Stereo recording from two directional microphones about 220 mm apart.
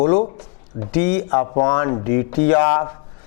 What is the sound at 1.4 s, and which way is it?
Speech, 25° left (ahead or behind).